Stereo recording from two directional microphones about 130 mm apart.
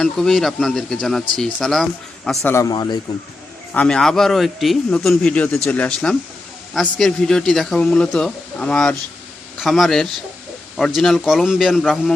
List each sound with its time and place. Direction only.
0.0 s speech: 5° left (ahead or behind)
2.4 s a man's voice: 20° left (ahead or behind)
3.8 s speech: 5° left (ahead or behind)